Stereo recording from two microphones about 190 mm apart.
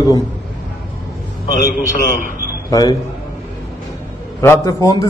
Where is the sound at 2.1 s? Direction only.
45° right (ahead or behind).